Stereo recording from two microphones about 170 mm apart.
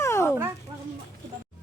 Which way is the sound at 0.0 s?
15° left (ahead or behind).